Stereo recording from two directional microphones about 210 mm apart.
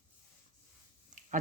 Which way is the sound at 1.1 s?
35° right (ahead or behind).